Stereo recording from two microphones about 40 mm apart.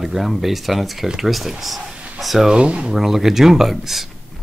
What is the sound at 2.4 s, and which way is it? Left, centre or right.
Speech, right.